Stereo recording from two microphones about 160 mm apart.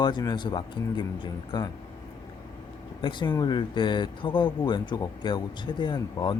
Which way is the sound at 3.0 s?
30° left (ahead or behind).